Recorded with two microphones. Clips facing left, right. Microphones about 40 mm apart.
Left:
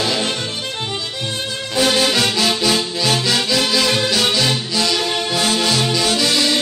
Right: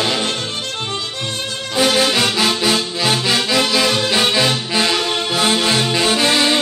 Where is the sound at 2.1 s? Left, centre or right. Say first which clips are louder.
Right 1 dB; right.